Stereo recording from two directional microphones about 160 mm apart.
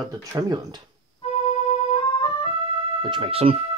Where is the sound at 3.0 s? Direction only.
30° right (ahead or behind).